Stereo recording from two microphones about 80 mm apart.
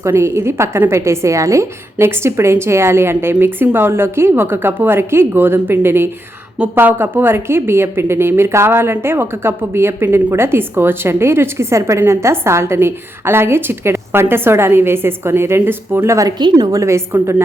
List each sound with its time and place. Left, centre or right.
0.0 s a woman's voice: right
16.4 s a woman's voice: right
16.7 s a woman's voice: right